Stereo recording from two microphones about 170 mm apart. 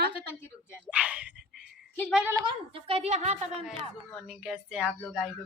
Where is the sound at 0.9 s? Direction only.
10° right (ahead or behind).